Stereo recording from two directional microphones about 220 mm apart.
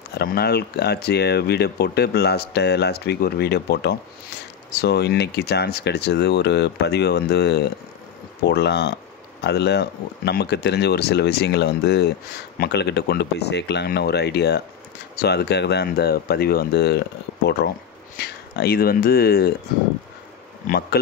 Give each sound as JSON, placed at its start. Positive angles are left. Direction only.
{"t": 0.1, "sound": "speech", "side_deg": 45}
{"t": 18.1, "sound": "speech", "side_deg": 45}
{"t": 20.6, "sound": "speech", "side_deg": 45}